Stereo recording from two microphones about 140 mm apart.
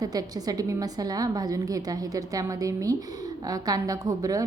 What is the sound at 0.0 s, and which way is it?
A woman's voice, 25° right (ahead or behind).